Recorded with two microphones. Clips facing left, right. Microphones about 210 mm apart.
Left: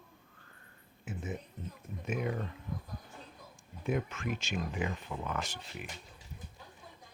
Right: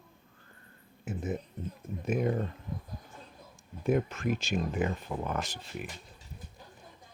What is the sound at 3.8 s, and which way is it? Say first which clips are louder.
Speech: right 6 dB; 40° right (ahead or behind).